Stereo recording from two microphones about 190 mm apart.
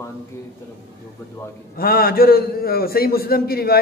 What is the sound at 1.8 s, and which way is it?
A woman's voice, 50° left (ahead or behind).